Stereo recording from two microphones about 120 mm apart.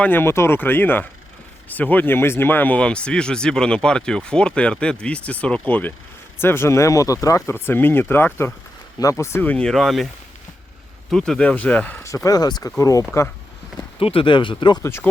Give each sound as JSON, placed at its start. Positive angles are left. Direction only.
{"t": 0.0, "sound": "speech", "side_deg": 15}
{"t": 11.1, "sound": "speech", "side_deg": 5}
{"t": 12.0, "sound": "speech", "side_deg": 25}
{"t": 14.0, "sound": "speech", "side_deg": 50}
{"t": 14.8, "sound": "speech", "side_deg": 20}